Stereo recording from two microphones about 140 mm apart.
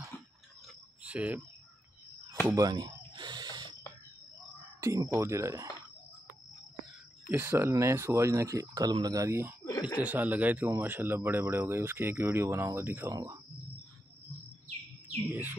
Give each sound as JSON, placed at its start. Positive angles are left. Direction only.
{"t": 0.7, "sound": "a sound", "side_deg": -10}
{"t": 2.4, "sound": "owl", "side_deg": -25}
{"t": 4.7, "sound": "speech", "side_deg": -20}
{"t": 7.2, "sound": "speech", "side_deg": -15}
{"t": 9.7, "sound": "a sound", "side_deg": 25}
{"t": 9.9, "sound": "speech", "side_deg": -10}
{"t": 15.2, "sound": "speech", "side_deg": -15}